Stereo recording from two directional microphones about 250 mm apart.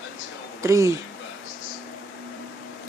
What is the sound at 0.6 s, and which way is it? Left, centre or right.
Speech, centre.